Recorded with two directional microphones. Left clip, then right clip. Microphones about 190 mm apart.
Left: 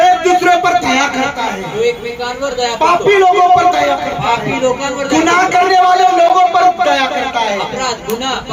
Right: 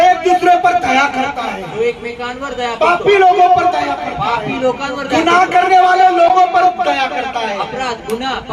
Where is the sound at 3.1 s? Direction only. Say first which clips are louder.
Even; 40° left (ahead or behind).